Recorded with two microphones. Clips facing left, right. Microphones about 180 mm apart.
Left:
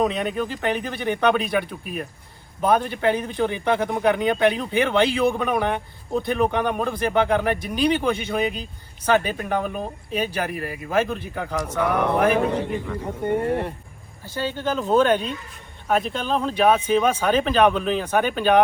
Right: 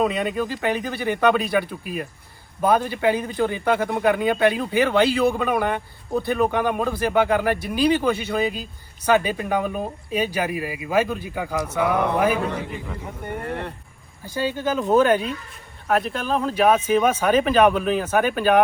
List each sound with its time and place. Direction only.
0.1 s speech: 5° right (ahead or behind)
13.2 s speech: 20° left (ahead or behind)
14.3 s speech: 10° right (ahead or behind)